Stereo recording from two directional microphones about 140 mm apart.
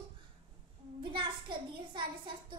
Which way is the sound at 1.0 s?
35° right (ahead or behind).